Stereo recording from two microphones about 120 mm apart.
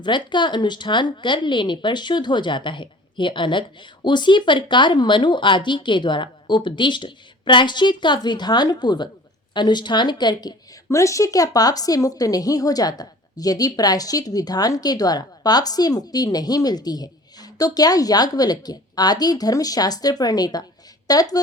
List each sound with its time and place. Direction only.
0.0 s speech: 40° left (ahead or behind)
10.8 s speech: 25° left (ahead or behind)